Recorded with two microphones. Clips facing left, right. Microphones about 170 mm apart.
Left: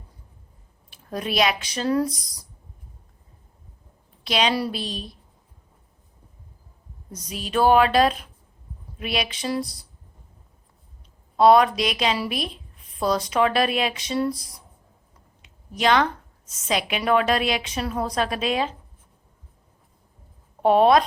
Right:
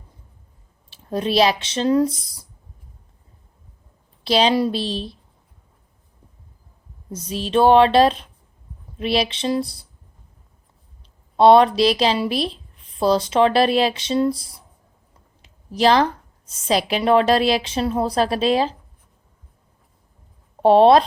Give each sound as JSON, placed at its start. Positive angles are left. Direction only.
{"t": 0.9, "sound": "a woman's voice", "side_deg": -30}
{"t": 4.2, "sound": "a woman's voice", "side_deg": -30}
{"t": 7.1, "sound": "a woman's voice", "side_deg": -30}
{"t": 11.3, "sound": "a woman's voice", "side_deg": -30}
{"t": 15.4, "sound": "a sound", "side_deg": -35}
{"t": 16.5, "sound": "a woman's voice", "side_deg": -30}
{"t": 20.6, "sound": "speech", "side_deg": -30}